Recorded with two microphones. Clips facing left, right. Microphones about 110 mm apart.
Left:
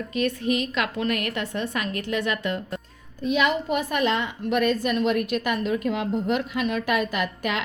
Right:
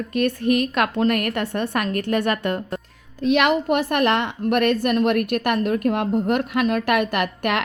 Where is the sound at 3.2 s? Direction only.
75° right (ahead or behind).